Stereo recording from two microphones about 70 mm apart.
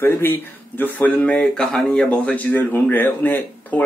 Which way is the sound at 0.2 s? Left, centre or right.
Left.